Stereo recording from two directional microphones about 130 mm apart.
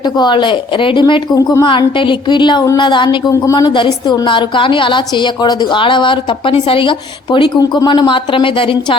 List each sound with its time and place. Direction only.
0.0 s a woman's voice: 35° left (ahead or behind)